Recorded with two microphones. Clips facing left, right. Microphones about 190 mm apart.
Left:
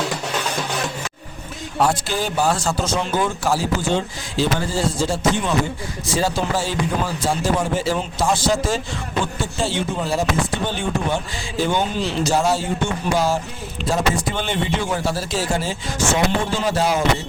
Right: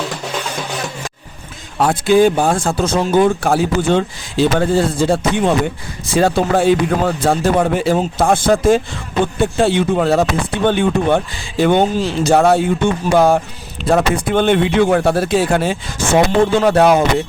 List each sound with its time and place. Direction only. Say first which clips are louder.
1.8 s speech: right 9 dB; 55° right (ahead or behind)